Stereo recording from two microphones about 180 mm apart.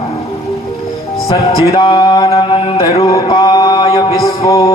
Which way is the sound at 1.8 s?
25° left (ahead or behind).